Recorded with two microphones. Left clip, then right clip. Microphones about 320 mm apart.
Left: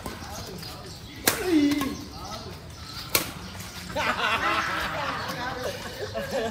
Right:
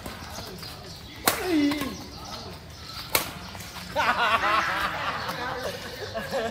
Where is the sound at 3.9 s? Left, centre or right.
Centre.